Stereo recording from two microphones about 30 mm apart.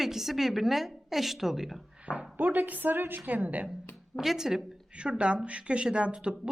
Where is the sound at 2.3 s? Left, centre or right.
Right.